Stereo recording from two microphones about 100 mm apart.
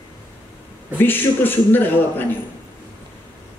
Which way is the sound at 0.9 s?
20° left (ahead or behind).